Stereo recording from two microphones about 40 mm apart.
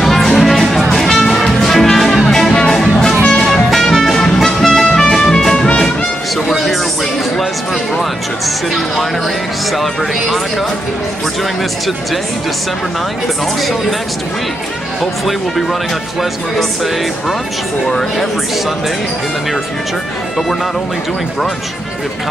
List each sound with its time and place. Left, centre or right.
0.0 s music: centre
3.7 s music: centre
8.0 s music: centre
13.6 s speech: centre
15.0 s speech: centre